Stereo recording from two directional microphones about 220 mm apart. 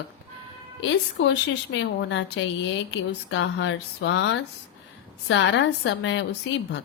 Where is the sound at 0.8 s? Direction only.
55° left (ahead or behind).